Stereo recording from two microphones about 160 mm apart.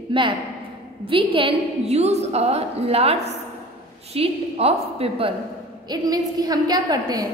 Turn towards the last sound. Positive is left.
turn(degrees=-25)  # may be behind; listen again after turning